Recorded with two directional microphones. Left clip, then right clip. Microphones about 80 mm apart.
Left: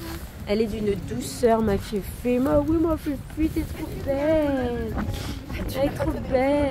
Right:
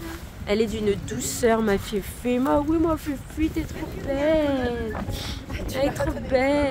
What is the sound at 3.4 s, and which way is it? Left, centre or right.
Speech, right.